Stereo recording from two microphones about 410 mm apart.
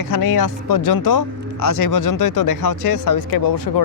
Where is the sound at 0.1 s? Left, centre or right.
Left.